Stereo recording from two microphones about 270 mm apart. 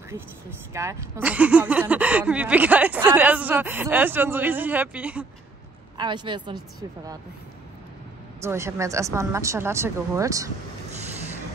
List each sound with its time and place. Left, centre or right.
0.7 s speech: centre
5.9 s speech: centre
8.4 s speech: centre